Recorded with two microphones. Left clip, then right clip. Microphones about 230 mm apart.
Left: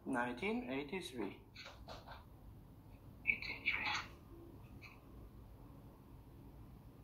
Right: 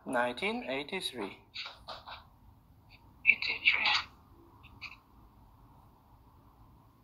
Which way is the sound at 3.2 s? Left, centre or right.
Right.